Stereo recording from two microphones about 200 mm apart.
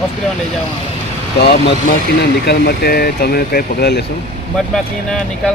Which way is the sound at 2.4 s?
50° left (ahead or behind).